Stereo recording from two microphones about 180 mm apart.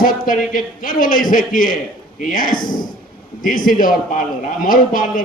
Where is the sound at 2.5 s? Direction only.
25° left (ahead or behind).